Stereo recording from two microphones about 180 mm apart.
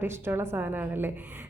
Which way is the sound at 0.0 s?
15° right (ahead or behind).